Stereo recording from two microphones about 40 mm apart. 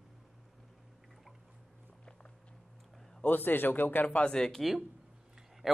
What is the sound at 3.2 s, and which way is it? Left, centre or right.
Speech, left.